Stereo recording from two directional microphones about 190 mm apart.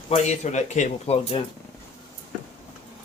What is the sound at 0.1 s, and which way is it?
Speech, 35° left (ahead or behind).